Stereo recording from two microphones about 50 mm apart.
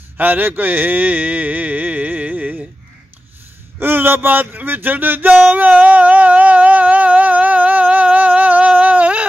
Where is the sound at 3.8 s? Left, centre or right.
Right.